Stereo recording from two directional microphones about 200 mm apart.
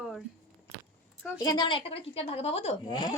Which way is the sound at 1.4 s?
20° left (ahead or behind).